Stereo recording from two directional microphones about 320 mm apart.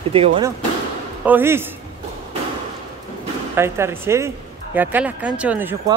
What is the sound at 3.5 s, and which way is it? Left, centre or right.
Speech, centre.